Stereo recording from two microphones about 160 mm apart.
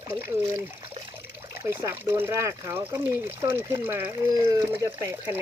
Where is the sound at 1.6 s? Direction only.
20° right (ahead or behind).